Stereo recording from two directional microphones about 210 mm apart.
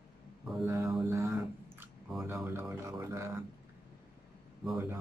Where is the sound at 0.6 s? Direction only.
10° right (ahead or behind).